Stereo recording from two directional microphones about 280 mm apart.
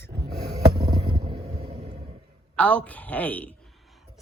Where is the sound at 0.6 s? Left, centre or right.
Right.